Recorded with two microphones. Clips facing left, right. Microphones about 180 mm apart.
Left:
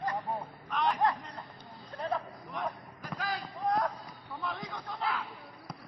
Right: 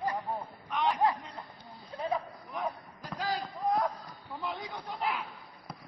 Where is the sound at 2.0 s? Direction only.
5° right (ahead or behind).